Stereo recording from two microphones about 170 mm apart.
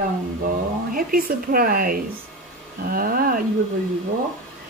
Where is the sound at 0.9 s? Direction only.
55° right (ahead or behind).